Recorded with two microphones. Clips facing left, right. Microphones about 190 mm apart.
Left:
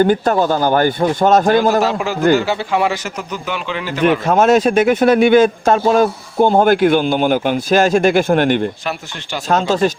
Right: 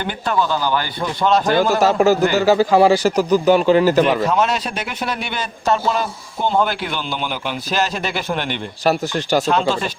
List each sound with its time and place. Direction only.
0.0 s speech: 45° left (ahead or behind)
1.8 s a man's voice: 45° right (ahead or behind)
4.0 s speech: 50° left (ahead or behind)
8.8 s a man's voice: 40° right (ahead or behind)
9.5 s speech: 40° left (ahead or behind)